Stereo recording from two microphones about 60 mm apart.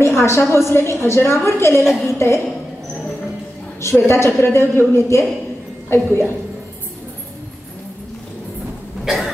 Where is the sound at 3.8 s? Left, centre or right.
Left.